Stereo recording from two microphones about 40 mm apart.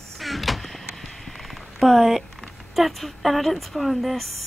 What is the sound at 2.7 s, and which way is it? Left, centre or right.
Speech, centre.